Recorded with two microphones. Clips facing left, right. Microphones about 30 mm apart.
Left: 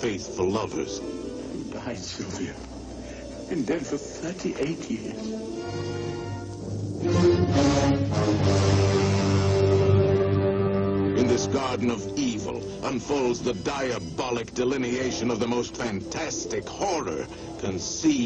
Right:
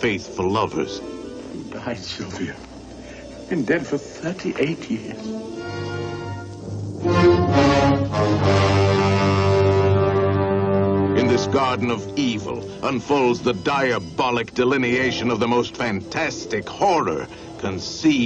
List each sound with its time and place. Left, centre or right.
0.4 s speech: right
2.0 s speech: right
3.4 s speech: right
7.1 s music: right
7.9 s music: right
8.5 s music: right
11.1 s speech: right
17.7 s speech: right